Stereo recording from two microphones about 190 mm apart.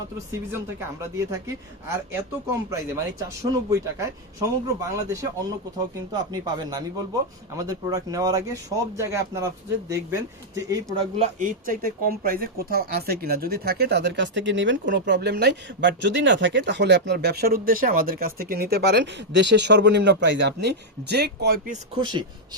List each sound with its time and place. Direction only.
1.1 s speech: 15° right (ahead or behind)
6.3 s speech: 20° right (ahead or behind)
10.9 s speech: 40° right (ahead or behind); by 21.5 s 60° right (ahead or behind)
21.9 s speech: 25° right (ahead or behind)